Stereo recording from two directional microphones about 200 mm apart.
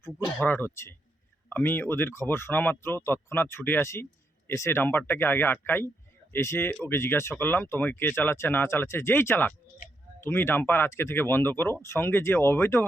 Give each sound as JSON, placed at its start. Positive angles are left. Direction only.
{"t": 0.3, "sound": "speech", "side_deg": 5}